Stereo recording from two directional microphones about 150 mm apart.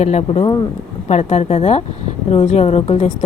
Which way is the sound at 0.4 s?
30° left (ahead or behind).